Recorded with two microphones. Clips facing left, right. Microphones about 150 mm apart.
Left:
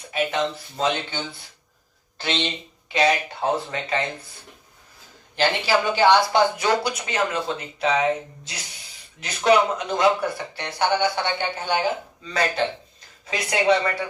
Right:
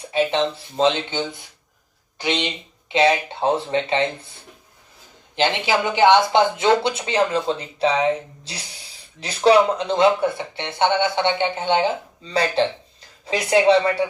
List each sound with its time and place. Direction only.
0.1 s speech: 30° right (ahead or behind)
5.4 s speech: 20° right (ahead or behind)